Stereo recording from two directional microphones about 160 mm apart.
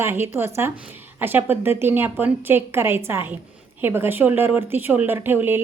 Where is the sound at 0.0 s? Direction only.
15° right (ahead or behind).